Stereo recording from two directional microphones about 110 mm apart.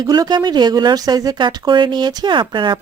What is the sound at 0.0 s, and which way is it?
Speech, 35° right (ahead or behind).